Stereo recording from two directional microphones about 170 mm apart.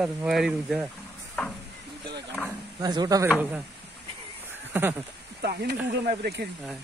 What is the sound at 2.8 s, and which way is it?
Speech, 25° right (ahead or behind).